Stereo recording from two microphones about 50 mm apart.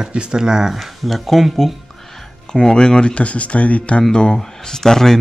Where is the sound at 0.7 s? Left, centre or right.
Centre.